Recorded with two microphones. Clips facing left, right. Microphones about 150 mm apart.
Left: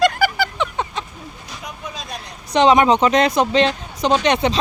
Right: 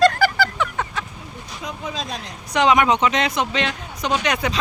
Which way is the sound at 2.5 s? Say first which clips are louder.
Left 4 dB; 25° left (ahead or behind).